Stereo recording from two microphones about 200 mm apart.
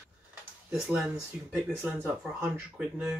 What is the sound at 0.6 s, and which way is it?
Speech, 5° right (ahead or behind).